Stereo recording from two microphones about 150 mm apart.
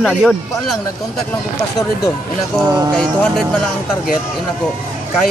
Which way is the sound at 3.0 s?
5° left (ahead or behind).